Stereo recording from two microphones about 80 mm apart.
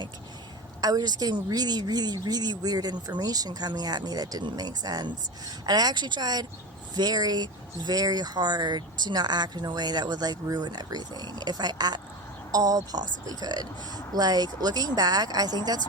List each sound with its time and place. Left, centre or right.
0.8 s a woman's voice: right